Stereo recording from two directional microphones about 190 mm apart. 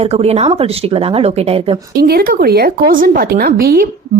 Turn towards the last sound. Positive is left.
turn(degrees=-50)  # may be behind; listen again after turning